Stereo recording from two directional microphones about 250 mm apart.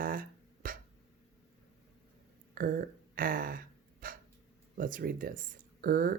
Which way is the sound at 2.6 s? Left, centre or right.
Right.